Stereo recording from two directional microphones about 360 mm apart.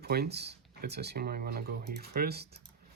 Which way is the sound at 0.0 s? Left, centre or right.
Right.